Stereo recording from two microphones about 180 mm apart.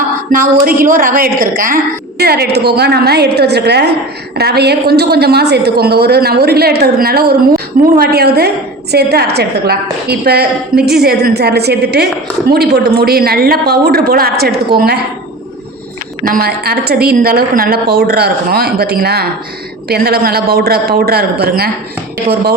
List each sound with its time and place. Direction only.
0.6 s a woman's voice: 50° right (ahead or behind)
16.2 s a woman's voice: 55° right (ahead or behind)